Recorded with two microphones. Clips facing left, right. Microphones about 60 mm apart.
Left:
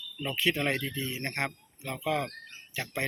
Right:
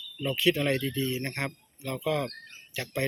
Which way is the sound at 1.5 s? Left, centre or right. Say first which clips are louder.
Right 2 dB; left.